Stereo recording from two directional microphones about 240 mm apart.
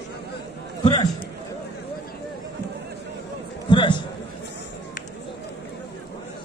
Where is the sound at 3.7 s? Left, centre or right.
Centre.